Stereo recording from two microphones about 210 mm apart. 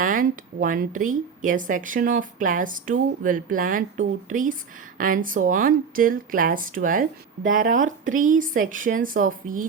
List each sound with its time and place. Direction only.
0.0 s speech: 40° right (ahead or behind)